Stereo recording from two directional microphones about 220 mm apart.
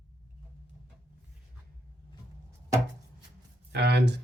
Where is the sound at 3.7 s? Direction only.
50° right (ahead or behind).